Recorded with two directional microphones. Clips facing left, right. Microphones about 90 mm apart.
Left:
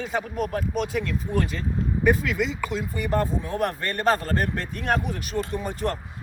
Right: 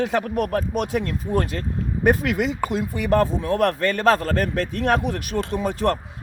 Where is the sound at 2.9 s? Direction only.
90° right.